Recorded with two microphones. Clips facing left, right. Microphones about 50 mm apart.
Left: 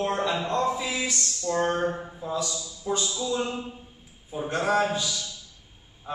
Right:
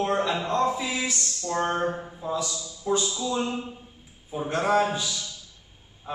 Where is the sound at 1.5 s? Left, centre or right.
Centre.